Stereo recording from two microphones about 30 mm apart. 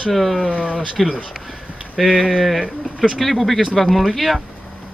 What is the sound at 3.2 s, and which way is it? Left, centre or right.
Speech, centre.